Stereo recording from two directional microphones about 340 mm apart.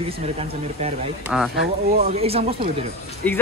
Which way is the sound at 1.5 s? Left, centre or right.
Right.